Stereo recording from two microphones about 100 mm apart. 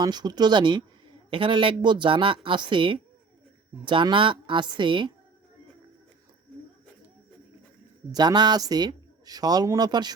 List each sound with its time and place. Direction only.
0.0 s speech: 45° right (ahead or behind)
4.1 s speech: 60° right (ahead or behind)
8.1 s speech: 45° right (ahead or behind)